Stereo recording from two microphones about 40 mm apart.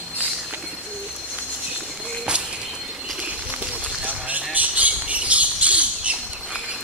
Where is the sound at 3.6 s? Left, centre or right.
Right.